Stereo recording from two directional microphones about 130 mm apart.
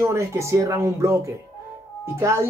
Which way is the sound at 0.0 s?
20° right (ahead or behind).